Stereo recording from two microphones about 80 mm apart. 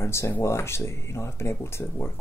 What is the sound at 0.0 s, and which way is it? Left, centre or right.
Speech, left.